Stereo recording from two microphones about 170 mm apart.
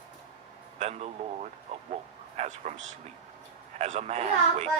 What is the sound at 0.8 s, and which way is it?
Speech, 40° right (ahead or behind).